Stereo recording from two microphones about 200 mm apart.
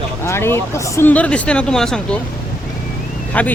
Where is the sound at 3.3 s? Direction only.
10° left (ahead or behind).